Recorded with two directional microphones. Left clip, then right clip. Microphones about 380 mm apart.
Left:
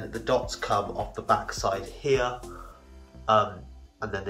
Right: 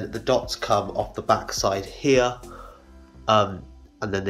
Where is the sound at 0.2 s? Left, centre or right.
Right.